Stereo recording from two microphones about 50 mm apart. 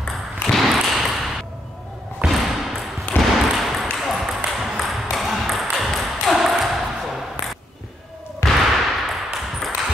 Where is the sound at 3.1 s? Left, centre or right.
Left.